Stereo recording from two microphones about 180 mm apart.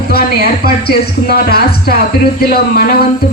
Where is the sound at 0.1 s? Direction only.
60° left (ahead or behind).